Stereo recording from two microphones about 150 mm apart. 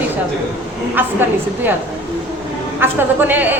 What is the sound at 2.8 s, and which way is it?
Speech, 10° right (ahead or behind).